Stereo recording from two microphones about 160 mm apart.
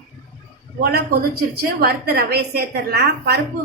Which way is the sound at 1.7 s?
75° right (ahead or behind).